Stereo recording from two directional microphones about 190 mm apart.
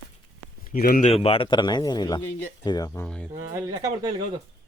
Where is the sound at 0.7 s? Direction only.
50° left (ahead or behind).